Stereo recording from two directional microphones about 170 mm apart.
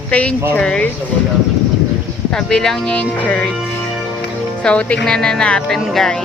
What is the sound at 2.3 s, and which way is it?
Speech, 5° left (ahead or behind).